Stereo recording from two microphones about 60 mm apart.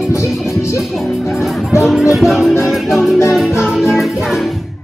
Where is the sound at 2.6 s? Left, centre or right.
Centre.